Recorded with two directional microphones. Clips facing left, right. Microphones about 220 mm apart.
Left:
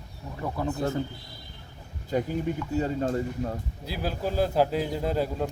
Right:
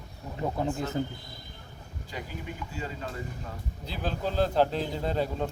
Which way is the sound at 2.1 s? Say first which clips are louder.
Left 12 dB; 45° left (ahead or behind).